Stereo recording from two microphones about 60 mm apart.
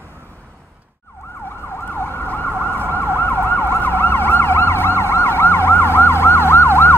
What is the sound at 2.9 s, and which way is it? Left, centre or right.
Emergency vehicle, left.